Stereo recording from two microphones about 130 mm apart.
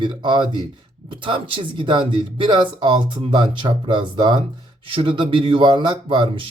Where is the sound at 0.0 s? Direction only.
35° right (ahead or behind).